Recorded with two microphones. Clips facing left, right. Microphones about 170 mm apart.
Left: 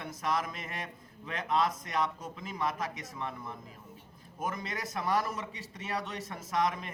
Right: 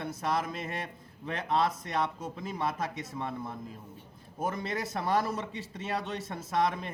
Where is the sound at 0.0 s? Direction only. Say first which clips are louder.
Right 2 dB; 30° right (ahead or behind).